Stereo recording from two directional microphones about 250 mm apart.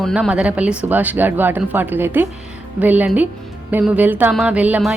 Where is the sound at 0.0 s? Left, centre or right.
Centre.